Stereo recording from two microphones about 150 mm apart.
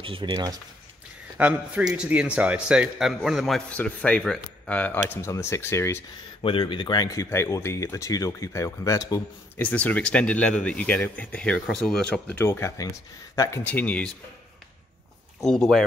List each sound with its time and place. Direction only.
0.0 s speech: 35° right (ahead or behind)
1.4 s a man's voice: 10° right (ahead or behind); by 6.0 s 15° left (ahead or behind)
6.4 s speech: 35° left (ahead or behind)
9.6 s speech: 10° left (ahead or behind)
15.4 s a man's voice: 5° left (ahead or behind)